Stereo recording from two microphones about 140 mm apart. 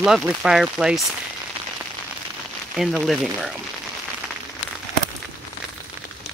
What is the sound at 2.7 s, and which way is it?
Speech, 5° right (ahead or behind).